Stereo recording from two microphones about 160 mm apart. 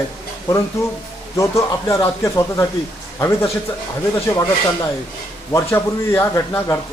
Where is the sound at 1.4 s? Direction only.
20° left (ahead or behind).